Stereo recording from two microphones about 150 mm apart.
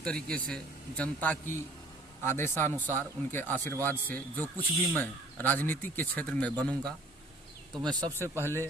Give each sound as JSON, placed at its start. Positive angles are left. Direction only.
{"t": 0.0, "sound": "a man's voice", "side_deg": 5}
{"t": 7.8, "sound": "speech", "side_deg": -30}
{"t": 8.1, "sound": "a man's voice", "side_deg": 15}